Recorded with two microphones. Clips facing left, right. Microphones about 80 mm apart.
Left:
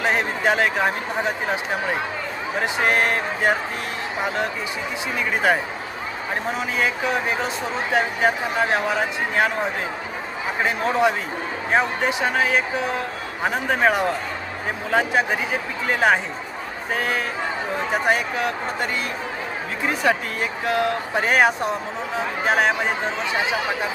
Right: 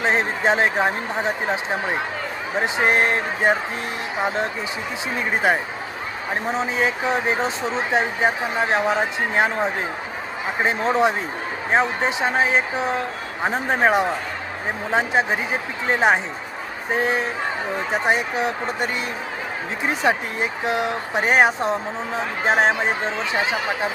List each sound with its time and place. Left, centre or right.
0.0 s a man's voice: right
2.6 s speech: right
5.1 s speech: right
6.6 s speech: right
10.6 s speech: right